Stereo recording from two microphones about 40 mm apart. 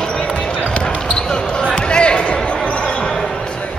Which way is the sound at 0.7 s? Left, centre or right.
Left.